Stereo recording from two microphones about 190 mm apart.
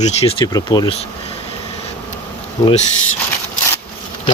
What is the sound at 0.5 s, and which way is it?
Speech, 20° left (ahead or behind).